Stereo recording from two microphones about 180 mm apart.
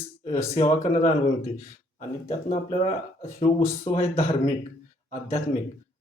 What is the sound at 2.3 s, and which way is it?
Speech, 35° left (ahead or behind).